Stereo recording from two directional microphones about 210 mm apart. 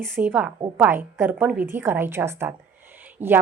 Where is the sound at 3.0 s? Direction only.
10° right (ahead or behind).